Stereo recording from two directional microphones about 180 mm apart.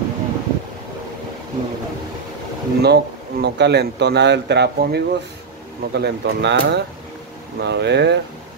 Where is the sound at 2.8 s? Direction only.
65° right (ahead or behind).